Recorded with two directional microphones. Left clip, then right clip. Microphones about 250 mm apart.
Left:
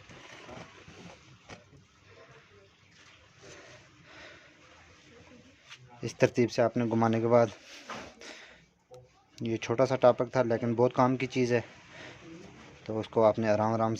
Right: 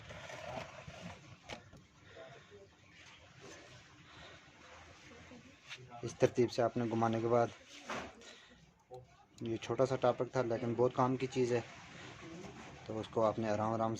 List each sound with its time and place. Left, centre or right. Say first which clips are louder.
6.1 s speech: left 5 dB; left
8.2 s a sound: left 9 dB; left
9.4 s speech: left 6 dB; left
12.9 s speech: left 9 dB; left